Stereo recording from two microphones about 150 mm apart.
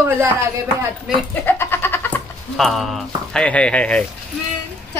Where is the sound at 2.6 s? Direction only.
Centre (ahead or behind).